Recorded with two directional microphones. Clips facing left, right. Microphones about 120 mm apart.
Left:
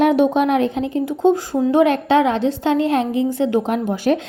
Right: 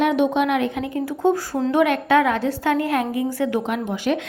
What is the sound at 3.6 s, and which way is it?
Speech, 40° left (ahead or behind).